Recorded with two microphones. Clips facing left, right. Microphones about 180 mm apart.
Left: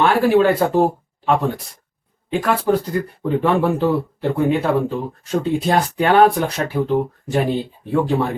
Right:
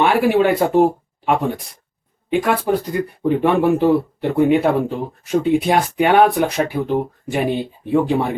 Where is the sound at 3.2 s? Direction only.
15° right (ahead or behind).